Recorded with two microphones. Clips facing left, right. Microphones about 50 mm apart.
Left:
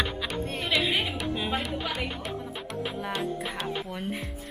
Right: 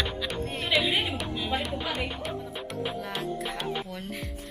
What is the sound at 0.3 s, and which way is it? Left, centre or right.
Music, centre.